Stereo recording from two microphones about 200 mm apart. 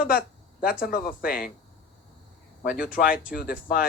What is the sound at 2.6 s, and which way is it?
Speech, 45° left (ahead or behind).